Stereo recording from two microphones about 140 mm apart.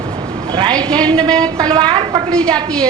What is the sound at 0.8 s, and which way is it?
Speech, 5° left (ahead or behind).